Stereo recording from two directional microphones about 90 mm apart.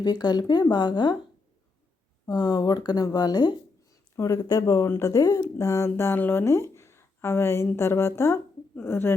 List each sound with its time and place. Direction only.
0.0 s speech: 50° left (ahead or behind)
2.2 s speech: 50° left (ahead or behind)
4.1 s speech: 30° left (ahead or behind)
4.4 s speech: 45° left (ahead or behind); by 6.4 s 20° left (ahead or behind)
6.4 s speech: 30° left (ahead or behind)